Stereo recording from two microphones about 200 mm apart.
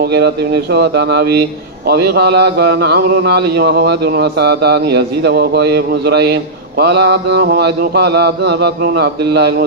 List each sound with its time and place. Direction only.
0.0 s a man's voice: 55° right (ahead or behind)